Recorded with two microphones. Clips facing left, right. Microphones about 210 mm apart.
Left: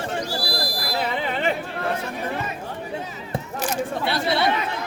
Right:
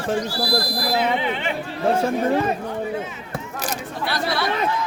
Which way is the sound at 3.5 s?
40° right (ahead or behind).